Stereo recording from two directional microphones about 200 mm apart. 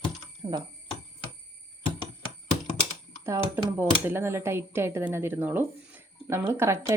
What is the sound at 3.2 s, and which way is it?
Speech, 10° right (ahead or behind).